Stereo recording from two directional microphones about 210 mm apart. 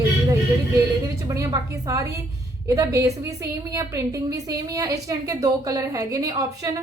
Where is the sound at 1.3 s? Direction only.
15° right (ahead or behind).